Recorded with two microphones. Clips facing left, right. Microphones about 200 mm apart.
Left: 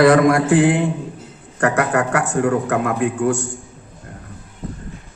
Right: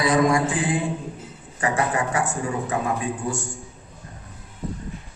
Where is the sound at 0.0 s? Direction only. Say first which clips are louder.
Left 7 dB; 70° left (ahead or behind).